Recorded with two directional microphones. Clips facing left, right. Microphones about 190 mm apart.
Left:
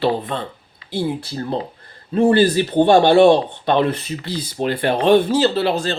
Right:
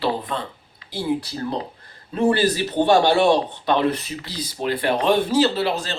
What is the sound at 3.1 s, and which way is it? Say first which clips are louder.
Speech: left 6 dB; 30° left (ahead or behind).